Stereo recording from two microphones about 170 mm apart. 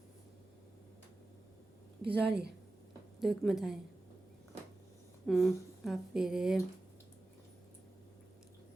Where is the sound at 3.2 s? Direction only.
Centre (ahead or behind).